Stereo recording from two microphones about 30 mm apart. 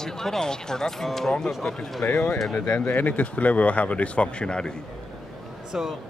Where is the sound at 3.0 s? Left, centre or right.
Left.